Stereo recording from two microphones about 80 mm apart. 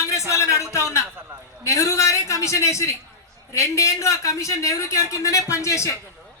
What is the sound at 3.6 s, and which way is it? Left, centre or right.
Speech, left.